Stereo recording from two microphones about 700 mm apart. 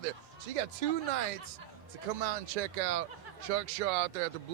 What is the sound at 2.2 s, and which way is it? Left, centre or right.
Speech, right.